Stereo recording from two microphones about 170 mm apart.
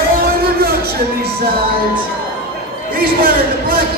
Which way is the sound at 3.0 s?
60° right (ahead or behind).